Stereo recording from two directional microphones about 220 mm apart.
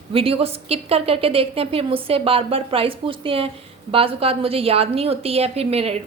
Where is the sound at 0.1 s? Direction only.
25° right (ahead or behind).